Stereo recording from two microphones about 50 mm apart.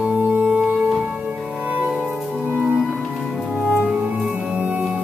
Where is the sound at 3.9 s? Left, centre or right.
Right.